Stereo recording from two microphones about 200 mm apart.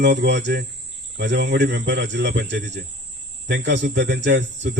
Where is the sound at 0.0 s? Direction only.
60° right (ahead or behind).